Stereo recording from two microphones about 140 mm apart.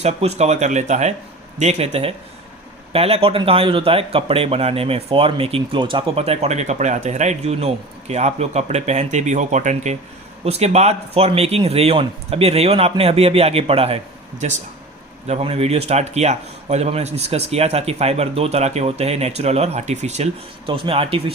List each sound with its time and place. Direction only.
0.0 s speech: 50° right (ahead or behind)
20.7 s speech: 40° right (ahead or behind)